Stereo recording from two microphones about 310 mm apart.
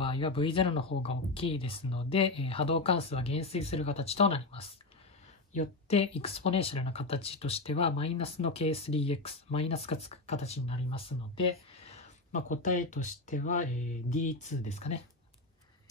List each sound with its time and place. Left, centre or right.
0.0 s speech: centre